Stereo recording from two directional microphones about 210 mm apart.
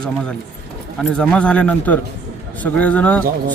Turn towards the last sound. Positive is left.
turn(degrees=5)  # may be behind; listen again after turning